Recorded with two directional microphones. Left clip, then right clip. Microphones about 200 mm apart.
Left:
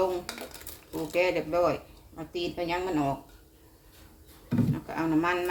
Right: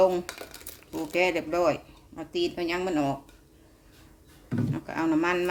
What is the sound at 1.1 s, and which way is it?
Speech, 60° right (ahead or behind).